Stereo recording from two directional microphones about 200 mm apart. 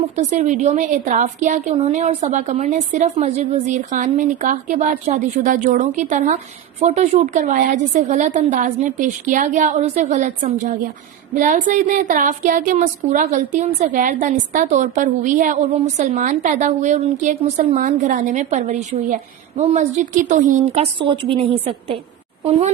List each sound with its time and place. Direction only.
0.2 s a woman's voice: 35° right (ahead or behind)
21.0 s a woman's voice: 25° right (ahead or behind)